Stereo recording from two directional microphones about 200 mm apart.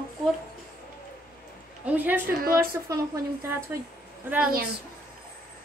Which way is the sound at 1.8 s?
10° right (ahead or behind).